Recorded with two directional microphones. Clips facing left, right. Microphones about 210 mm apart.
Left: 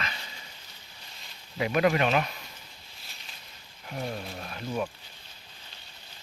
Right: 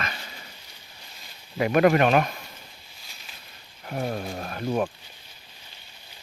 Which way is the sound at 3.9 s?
50° right (ahead or behind).